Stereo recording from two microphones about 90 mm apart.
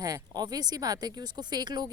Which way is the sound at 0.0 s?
45° right (ahead or behind).